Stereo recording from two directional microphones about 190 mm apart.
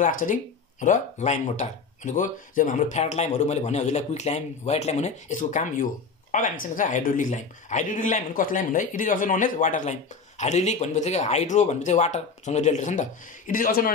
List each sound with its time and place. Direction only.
0.0 s speech: 45° left (ahead or behind)